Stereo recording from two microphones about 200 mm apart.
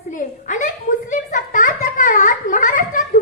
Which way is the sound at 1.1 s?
40° left (ahead or behind).